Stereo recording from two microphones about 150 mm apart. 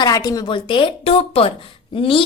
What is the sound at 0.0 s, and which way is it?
A woman's voice, 25° left (ahead or behind).